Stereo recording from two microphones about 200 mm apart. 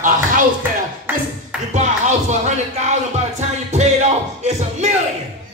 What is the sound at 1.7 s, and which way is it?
Music, 35° right (ahead or behind).